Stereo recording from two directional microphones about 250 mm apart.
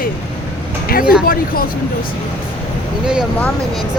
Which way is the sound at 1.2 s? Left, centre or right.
Left.